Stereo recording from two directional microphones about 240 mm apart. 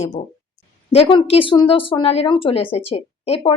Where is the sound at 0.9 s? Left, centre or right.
Left.